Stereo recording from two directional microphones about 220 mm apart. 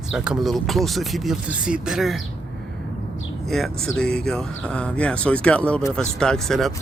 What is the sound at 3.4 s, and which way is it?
Speech, centre (ahead or behind).